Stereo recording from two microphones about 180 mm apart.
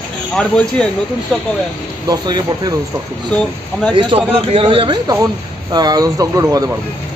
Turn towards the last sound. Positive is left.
turn(degrees=-20)  # may be behind; listen again after turning